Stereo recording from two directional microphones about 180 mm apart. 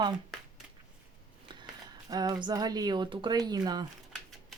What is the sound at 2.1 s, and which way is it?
Speech, 20° right (ahead or behind).